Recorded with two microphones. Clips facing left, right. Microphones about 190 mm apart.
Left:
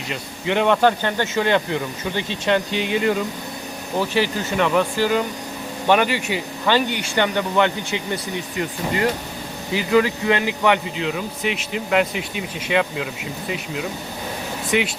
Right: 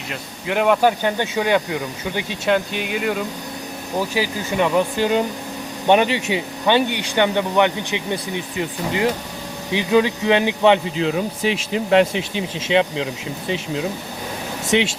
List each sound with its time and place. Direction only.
0.4 s speech: 5° right (ahead or behind); by 11.0 s 25° right (ahead or behind)
11.0 s speech: 35° right (ahead or behind)
14.7 s speech: 25° right (ahead or behind)